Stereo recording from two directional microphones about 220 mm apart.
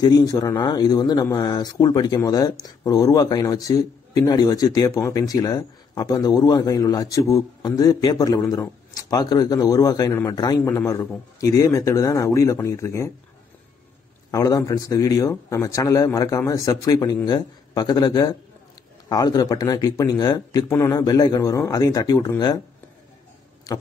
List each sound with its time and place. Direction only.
0.0 s speech: 15° left (ahead or behind)
14.3 s speech: 15° left (ahead or behind)